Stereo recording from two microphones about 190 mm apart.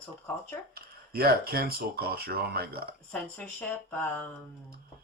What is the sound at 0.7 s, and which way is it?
Speech, 50° right (ahead or behind).